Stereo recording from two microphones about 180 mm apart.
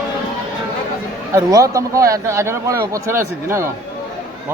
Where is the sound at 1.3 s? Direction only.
20° right (ahead or behind).